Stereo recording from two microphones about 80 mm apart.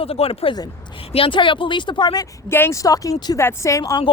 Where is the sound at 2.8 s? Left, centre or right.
Left.